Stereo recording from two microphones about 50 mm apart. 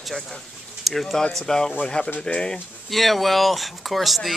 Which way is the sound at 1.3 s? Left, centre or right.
Centre.